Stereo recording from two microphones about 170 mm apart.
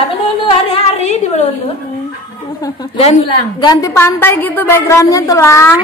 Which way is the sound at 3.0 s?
35° left (ahead or behind).